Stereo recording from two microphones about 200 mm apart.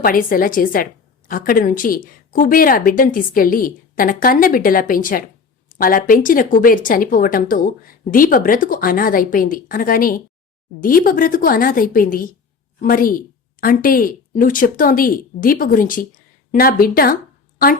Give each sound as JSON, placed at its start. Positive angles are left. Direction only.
{"t": 0.0, "sound": "speech", "side_deg": 45}